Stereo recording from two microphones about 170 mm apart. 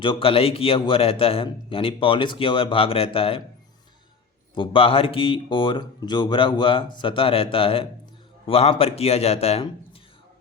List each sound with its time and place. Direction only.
0.0 s a man's voice: 30° left (ahead or behind)
4.5 s a man's voice: 30° left (ahead or behind)